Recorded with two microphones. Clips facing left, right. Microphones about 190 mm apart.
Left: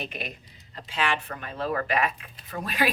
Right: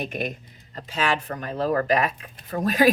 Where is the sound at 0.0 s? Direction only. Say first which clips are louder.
Right 7 dB; 45° right (ahead or behind).